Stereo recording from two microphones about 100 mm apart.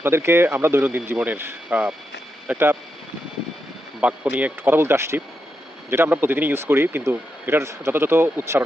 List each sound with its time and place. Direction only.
0.0 s speech: 25° right (ahead or behind)
4.0 s speech: 15° right (ahead or behind)